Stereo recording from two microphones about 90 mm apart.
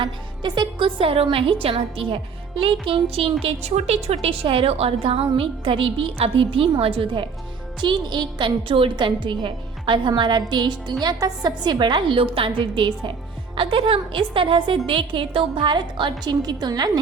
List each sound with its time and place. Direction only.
0.0 s a woman's voice: 55° right (ahead or behind)
0.9 s a woman's voice: 90° right; by 7.3 s 75° right (ahead or behind)
7.8 s a woman's voice: 55° right (ahead or behind)